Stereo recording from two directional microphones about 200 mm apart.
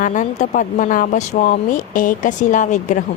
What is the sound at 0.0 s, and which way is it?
Speech, 40° left (ahead or behind).